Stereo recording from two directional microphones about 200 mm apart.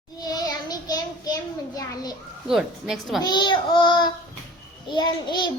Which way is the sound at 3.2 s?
20° left (ahead or behind).